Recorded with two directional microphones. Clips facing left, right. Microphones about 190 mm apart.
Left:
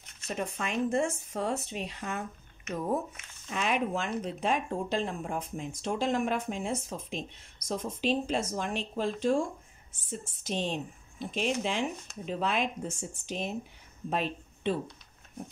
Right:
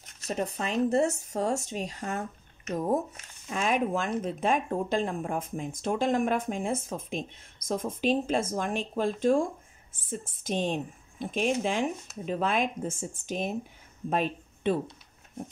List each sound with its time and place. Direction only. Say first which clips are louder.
0.0 s speech: right 3 dB; 40° right (ahead or behind)
10.4 s speech: right 3 dB; 50° right (ahead or behind)